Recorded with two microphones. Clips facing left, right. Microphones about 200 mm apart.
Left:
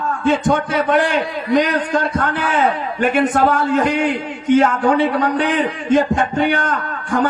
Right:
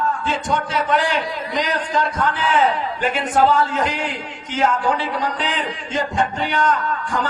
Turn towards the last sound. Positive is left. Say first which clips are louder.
# left 4 dB
turn(degrees=55)  # may be behind; listen again after turning